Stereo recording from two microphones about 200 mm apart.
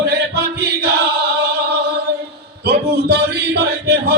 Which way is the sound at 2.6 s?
50° right (ahead or behind).